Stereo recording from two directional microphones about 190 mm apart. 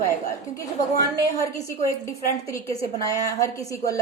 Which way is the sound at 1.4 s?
15° left (ahead or behind).